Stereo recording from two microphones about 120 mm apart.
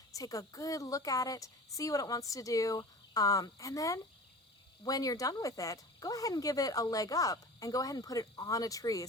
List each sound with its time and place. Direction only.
0.1 s speech: 30° left (ahead or behind)